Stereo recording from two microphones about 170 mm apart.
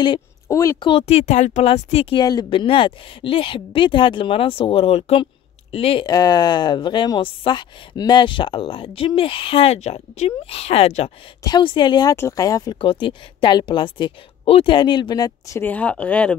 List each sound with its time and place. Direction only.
0.0 s speech: 20° left (ahead or behind)
6.0 s speech: 20° left (ahead or behind); by 11.1 s 40° left (ahead or behind)
11.4 s speech: 25° left (ahead or behind); by 16.3 s 5° left (ahead or behind)